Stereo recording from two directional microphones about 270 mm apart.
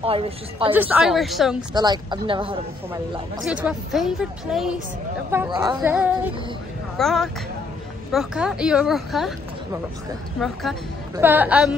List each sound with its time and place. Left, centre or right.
0.0 s speech: right
0.7 s a woman's voice: centre
1.7 s a woman's voice: centre
2.9 s a woman's voice: centre
10.4 s a woman's voice: centre